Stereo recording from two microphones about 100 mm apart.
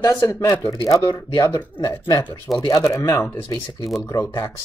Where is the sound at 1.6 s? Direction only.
45° left (ahead or behind).